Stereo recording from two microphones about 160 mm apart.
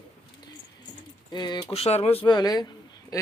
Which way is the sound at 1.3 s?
30° left (ahead or behind).